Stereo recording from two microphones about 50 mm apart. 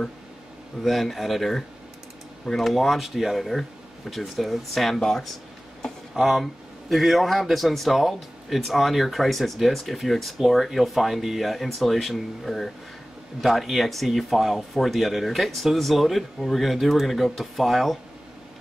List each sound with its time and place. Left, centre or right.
0.8 s speech: centre